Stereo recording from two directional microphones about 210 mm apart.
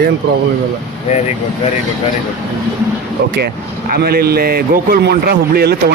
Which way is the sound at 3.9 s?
45° right (ahead or behind).